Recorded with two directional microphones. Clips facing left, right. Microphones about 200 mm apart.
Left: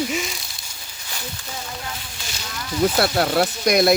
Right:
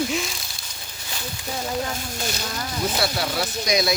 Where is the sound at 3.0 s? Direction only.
55° left (ahead or behind).